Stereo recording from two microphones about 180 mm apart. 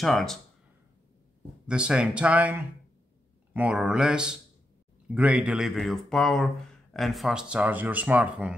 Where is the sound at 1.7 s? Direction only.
5° right (ahead or behind).